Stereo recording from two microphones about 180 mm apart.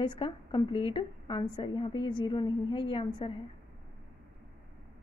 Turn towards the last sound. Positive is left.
turn(degrees=25)  # may be behind; listen again after turning